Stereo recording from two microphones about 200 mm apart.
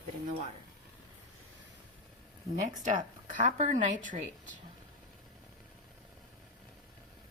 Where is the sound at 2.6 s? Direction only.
40° right (ahead or behind).